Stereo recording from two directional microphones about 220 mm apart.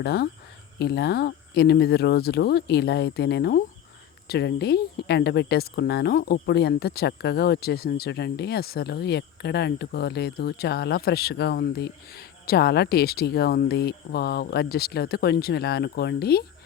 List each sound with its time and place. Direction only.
0.0 s speech: 45° left (ahead or behind)